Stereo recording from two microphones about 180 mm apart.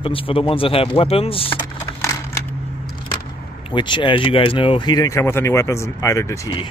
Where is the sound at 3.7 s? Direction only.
25° left (ahead or behind).